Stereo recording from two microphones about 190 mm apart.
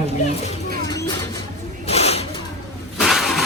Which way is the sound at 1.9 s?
35° left (ahead or behind).